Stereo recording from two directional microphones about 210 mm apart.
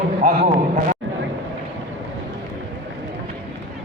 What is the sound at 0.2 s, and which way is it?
Speech, 40° right (ahead or behind).